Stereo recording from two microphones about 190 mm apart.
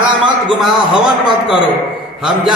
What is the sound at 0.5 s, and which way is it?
Speech, centre (ahead or behind).